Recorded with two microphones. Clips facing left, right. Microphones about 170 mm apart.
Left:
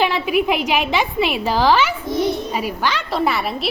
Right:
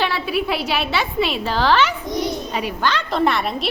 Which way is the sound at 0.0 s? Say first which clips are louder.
Left 4 dB; 15° left (ahead or behind).